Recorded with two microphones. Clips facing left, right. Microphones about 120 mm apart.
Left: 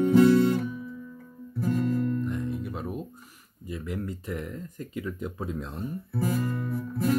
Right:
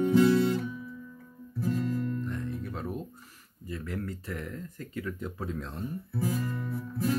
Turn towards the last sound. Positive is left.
turn(degrees=50)  # may be behind; listen again after turning